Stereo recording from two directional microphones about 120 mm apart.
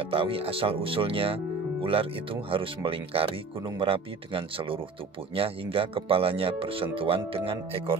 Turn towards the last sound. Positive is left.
turn(degrees=-50)  # may be behind; listen again after turning